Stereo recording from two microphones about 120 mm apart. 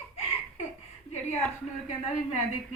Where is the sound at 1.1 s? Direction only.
60° left (ahead or behind).